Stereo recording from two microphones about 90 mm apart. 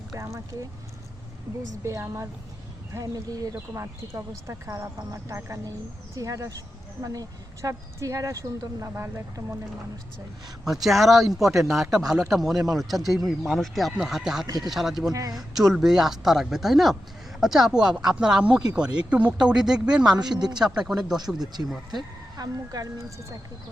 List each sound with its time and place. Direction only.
0.1 s speech: 35° right (ahead or behind)
1.8 s speech: 30° right (ahead or behind)
10.6 s speech: 5° right (ahead or behind)
15.1 s speech: 40° right (ahead or behind)
15.7 s speech: 5° right (ahead or behind)
21.4 s speech: 50° right (ahead or behind)